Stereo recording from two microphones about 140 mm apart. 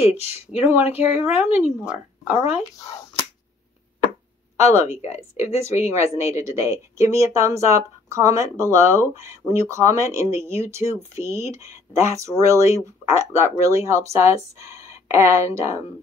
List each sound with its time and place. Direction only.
0.5 s speech: 10° right (ahead or behind)
4.6 s a woman's voice: 20° right (ahead or behind)